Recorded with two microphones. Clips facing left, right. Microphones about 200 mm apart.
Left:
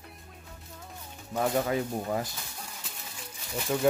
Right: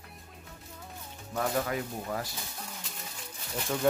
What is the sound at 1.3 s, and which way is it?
Speech, 25° left (ahead or behind).